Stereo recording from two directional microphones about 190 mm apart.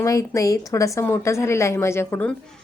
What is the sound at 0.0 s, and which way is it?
A woman's voice, 15° left (ahead or behind).